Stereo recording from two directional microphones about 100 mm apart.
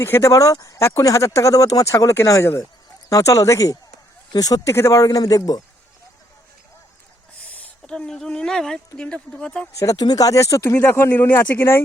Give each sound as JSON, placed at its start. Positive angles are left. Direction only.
{"t": 0.0, "sound": "speech", "side_deg": 30}
{"t": 7.6, "sound": "speech", "side_deg": 10}
{"t": 9.7, "sound": "speech", "side_deg": 35}